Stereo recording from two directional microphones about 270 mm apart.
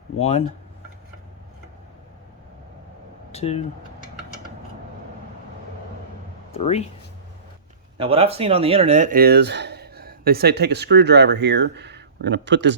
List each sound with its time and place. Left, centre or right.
0.2 s speech: left
3.3 s speech: left
6.5 s speech: left
7.9 s speech: centre; by 12.7 s right